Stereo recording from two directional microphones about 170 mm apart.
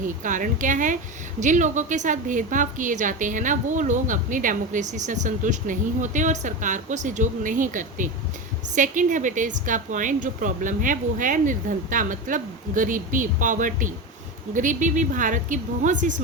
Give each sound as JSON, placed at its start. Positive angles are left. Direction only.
{"t": 0.3, "sound": "a woman's voice", "side_deg": -50}